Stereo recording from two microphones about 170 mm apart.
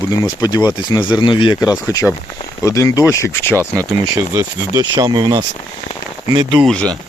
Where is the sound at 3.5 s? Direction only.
20° right (ahead or behind).